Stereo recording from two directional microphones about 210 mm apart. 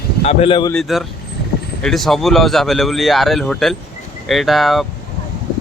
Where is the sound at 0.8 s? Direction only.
Centre (ahead or behind).